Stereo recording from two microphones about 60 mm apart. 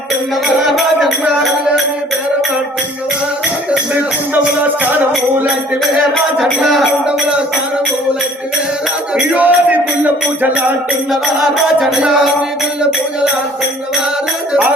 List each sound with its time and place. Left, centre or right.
0.4 s music: centre
6.1 s music: centre
9.1 s music: right
11.1 s music: centre